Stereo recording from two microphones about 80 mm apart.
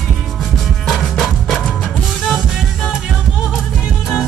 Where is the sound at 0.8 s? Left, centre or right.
Centre.